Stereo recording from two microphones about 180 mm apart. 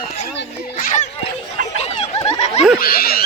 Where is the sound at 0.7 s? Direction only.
45° left (ahead or behind).